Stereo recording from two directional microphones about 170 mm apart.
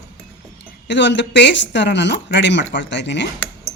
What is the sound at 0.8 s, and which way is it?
Speech, 90° left.